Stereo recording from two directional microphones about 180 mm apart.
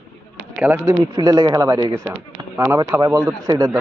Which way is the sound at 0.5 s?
10° right (ahead or behind).